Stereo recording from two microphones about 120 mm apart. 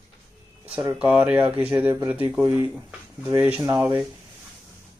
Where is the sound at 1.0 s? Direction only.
10° right (ahead or behind).